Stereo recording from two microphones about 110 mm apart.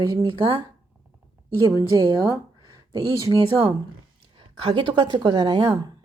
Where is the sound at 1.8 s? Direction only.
35° right (ahead or behind).